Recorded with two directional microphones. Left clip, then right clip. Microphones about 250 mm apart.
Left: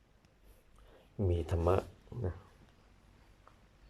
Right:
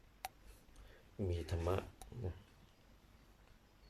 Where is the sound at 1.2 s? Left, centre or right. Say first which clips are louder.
Left 8 dB; centre.